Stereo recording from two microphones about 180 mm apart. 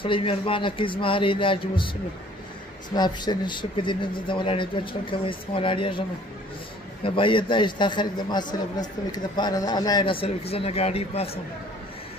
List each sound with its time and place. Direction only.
0.0 s a man's voice: 30° left (ahead or behind)
2.9 s a man's voice: 25° left (ahead or behind)